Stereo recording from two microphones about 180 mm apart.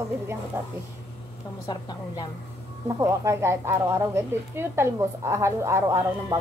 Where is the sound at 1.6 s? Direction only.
25° left (ahead or behind).